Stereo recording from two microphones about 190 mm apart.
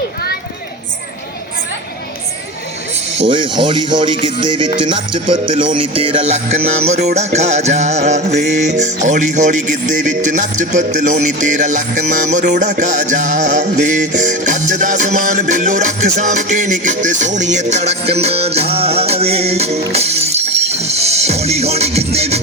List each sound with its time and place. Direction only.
3.2 s speech: 25° right (ahead or behind)
7.2 s music: 35° right (ahead or behind)